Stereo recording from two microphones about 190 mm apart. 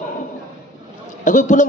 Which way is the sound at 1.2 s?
40° left (ahead or behind).